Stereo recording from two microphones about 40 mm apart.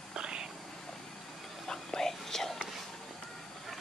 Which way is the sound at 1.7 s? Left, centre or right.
Centre.